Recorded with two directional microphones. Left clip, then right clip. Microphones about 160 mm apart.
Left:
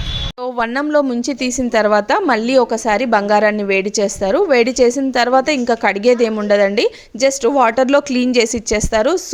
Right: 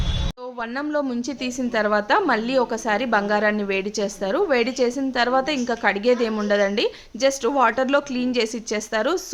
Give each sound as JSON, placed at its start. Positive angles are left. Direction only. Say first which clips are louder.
{"t": 0.6, "sound": "a woman's voice", "louder": "left 9 dB", "side_deg": 50}